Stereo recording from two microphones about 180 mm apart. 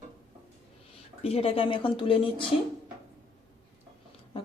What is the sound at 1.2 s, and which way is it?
Speech, 35° left (ahead or behind).